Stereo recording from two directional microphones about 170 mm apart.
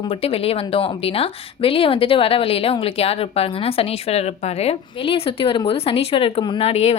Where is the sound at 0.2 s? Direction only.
35° left (ahead or behind).